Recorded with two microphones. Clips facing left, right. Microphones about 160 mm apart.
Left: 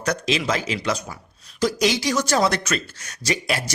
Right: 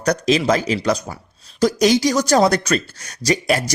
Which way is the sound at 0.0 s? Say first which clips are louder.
Right 6 dB; 40° right (ahead or behind).